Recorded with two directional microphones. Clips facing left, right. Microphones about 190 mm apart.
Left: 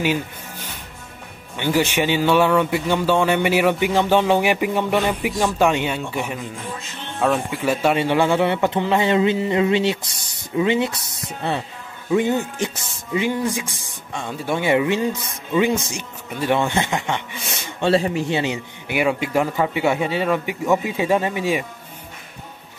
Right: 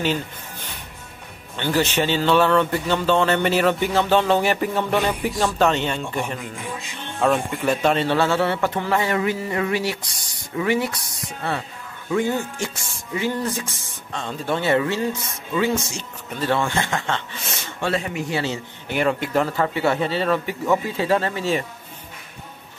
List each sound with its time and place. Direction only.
1.6 s speech: 10° left (ahead or behind)
17.8 s speech: 30° left (ahead or behind)
18.4 s speech: 15° left (ahead or behind)